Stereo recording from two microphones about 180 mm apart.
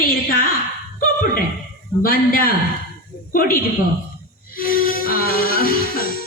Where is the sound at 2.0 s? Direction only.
50° left (ahead or behind).